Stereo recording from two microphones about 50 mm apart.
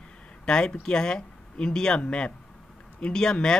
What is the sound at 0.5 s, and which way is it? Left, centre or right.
Speech, centre.